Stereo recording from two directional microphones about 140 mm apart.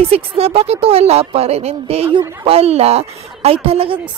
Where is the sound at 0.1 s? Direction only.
45° right (ahead or behind).